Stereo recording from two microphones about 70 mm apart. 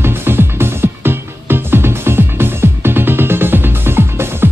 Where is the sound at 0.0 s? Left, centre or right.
Right.